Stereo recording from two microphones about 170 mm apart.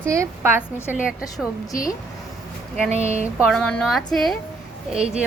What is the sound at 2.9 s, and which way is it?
Speech, 40° right (ahead or behind).